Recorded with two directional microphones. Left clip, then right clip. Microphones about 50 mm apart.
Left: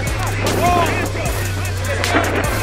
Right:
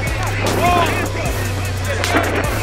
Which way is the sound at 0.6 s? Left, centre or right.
Centre.